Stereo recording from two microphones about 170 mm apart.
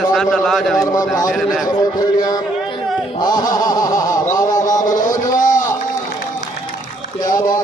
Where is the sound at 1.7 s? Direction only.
25° left (ahead or behind).